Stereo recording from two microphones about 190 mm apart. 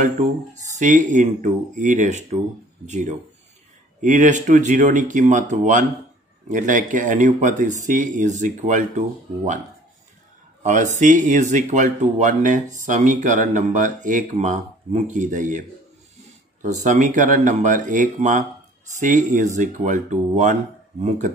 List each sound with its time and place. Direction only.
0.2 s speech: 35° right (ahead or behind)
10.6 s speech: 40° right (ahead or behind)
16.6 s speech: 40° right (ahead or behind)